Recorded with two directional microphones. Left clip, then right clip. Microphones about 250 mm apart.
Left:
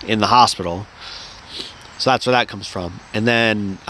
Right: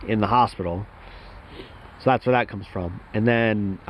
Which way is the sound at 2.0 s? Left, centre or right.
Centre.